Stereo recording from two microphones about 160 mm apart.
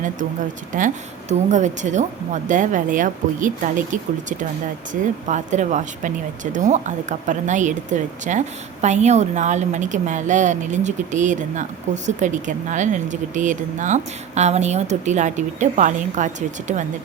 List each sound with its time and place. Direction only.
0.7 s speech: 55° right (ahead or behind)